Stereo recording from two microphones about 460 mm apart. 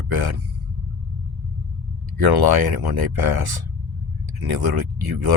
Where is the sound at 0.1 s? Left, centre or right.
Right.